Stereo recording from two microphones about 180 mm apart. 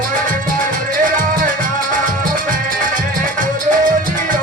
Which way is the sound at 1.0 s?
45° right (ahead or behind).